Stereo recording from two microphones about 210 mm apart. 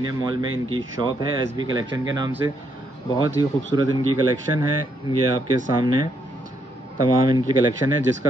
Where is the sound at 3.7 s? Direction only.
20° right (ahead or behind).